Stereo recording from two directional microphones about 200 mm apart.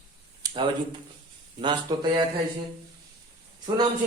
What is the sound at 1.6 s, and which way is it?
Speech, 20° right (ahead or behind).